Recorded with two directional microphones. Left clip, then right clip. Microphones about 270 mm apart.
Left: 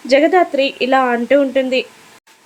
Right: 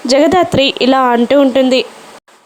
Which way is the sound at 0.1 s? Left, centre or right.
Right.